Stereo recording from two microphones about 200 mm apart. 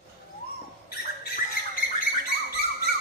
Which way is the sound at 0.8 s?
50° left (ahead or behind).